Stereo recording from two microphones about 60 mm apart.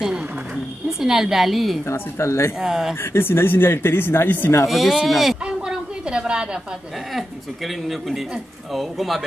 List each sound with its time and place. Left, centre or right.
0.8 s speech: centre
1.9 s speech: left
2.6 s speech: centre
3.0 s speech: left
4.6 s speech: centre
6.0 s a woman's voice: centre
7.2 s speech: centre